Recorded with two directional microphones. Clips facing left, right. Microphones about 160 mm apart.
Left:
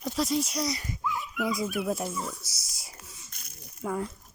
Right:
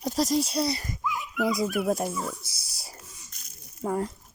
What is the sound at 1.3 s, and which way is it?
Speech, 35° right (ahead or behind).